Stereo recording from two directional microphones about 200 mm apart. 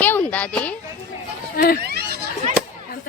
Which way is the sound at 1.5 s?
50° left (ahead or behind).